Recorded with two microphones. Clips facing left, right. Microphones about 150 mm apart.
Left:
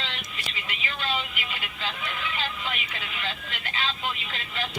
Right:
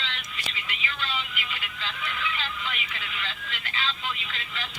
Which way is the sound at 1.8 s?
45° left (ahead or behind).